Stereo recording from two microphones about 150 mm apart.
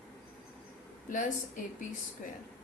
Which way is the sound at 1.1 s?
60° left (ahead or behind).